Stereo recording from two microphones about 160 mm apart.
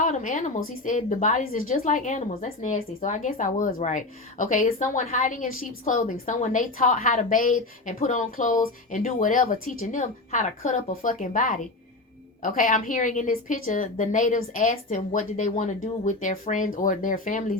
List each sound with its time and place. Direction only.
0.0 s a woman's voice: 50° left (ahead or behind)